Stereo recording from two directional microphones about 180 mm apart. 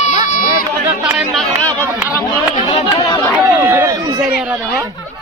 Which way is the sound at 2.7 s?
30° left (ahead or behind).